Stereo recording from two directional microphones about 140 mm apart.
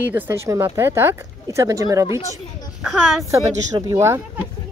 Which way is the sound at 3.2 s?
25° right (ahead or behind).